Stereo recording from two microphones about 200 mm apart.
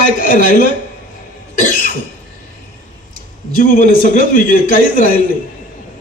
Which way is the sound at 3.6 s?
45° left (ahead or behind).